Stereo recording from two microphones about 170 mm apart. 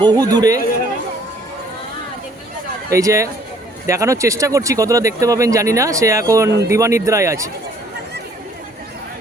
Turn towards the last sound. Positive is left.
turn(degrees=-15)  # may be behind; listen again after turning